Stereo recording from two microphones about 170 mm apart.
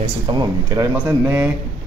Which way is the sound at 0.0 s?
25° right (ahead or behind).